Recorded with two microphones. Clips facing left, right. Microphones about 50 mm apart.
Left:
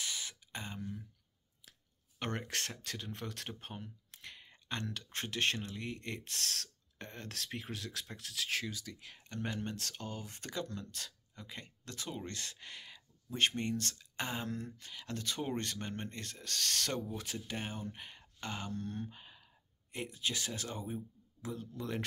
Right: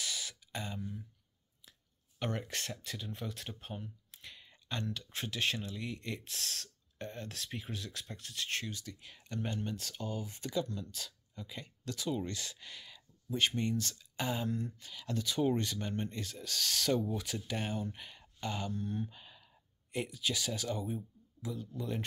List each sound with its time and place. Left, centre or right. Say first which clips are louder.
0.0 s a sound: right 1 dB; left
0.7 s speech: right 1 dB; left
2.1 s speech: right 1 dB; left
4.1 s a sound: left 1 dB; left
4.9 s speech: even; left
8.9 s speech: even; left
9.4 s speech: right 1 dB; left
17.1 s speech: right 3 dB; left
18.8 s speech: right 3 dB; left
19.0 s a sound: left 1 dB; left
20.1 s speech: right 2 dB; left